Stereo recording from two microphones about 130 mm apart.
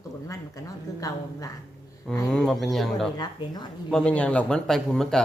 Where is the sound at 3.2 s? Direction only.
30° left (ahead or behind).